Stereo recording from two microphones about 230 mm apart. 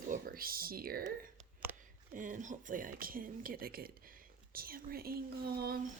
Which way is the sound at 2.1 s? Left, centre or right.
Right.